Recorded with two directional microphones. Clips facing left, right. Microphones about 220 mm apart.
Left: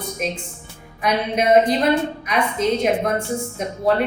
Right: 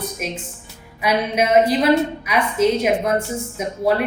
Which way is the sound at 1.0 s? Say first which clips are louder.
Even; 5° right (ahead or behind).